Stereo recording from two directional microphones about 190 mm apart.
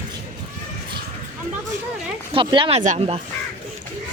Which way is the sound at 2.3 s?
25° right (ahead or behind).